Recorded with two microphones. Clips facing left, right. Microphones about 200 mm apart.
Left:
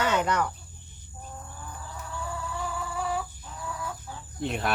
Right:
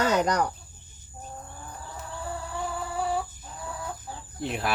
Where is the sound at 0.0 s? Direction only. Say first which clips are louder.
Right 2 dB; 40° right (ahead or behind).